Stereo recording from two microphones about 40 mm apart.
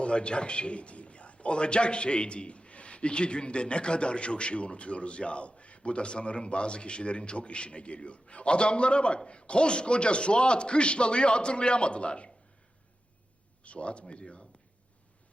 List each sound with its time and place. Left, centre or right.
0.0 s a man's voice: left
13.7 s a man's voice: left